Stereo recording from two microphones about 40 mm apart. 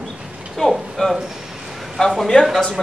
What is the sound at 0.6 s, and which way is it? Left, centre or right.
Speech, centre.